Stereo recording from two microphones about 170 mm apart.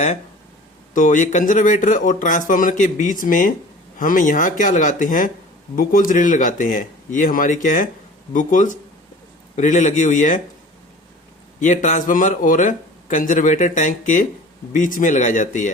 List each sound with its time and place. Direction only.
0.9 s a man's voice: 50° left (ahead or behind)
11.6 s a man's voice: 45° left (ahead or behind)